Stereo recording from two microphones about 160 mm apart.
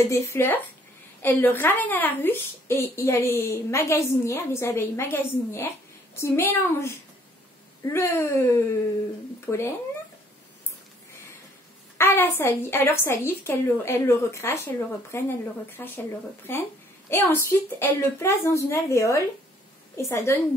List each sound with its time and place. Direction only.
0.1 s a woman's voice: 15° left (ahead or behind)
12.0 s a woman's voice: 15° left (ahead or behind)